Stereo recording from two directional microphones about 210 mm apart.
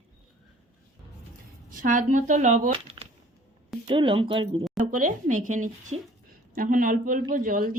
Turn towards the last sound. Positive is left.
turn(degrees=-40)  # may be behind; listen again after turning